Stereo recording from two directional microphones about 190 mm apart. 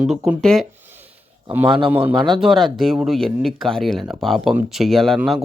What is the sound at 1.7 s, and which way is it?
Speech, 25° right (ahead or behind).